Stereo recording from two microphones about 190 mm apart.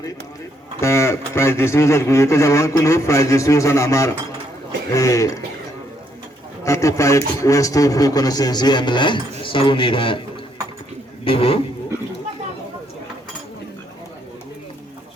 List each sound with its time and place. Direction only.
0.8 s speech: 15° left (ahead or behind)
6.7 s speech: 15° left (ahead or behind)
11.3 s speech: 30° left (ahead or behind)